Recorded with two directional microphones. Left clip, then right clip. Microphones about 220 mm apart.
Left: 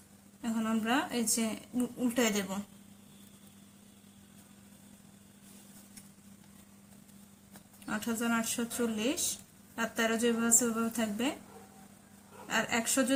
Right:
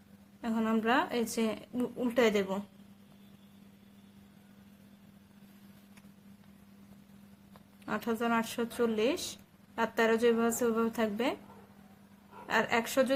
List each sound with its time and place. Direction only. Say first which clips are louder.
0.4 s a woman's voice: right 3 dB; 40° right (ahead or behind)
7.9 s a woman's voice: right 2 dB; 40° right (ahead or behind)
12.5 s a woman's voice: right 2 dB; 40° right (ahead or behind)